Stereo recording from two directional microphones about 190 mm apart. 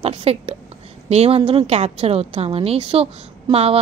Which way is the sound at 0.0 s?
30° right (ahead or behind).